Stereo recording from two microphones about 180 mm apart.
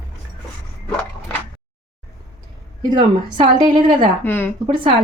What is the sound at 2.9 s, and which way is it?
Speech, 25° right (ahead or behind).